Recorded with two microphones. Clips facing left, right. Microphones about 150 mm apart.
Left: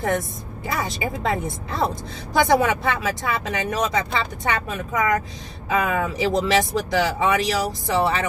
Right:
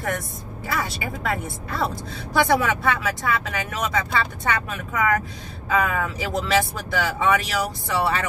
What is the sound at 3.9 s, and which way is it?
Speech, 20° left (ahead or behind).